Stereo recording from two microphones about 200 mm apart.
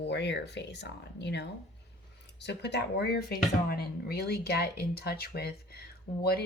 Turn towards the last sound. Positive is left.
turn(degrees=50)  # may be behind; listen again after turning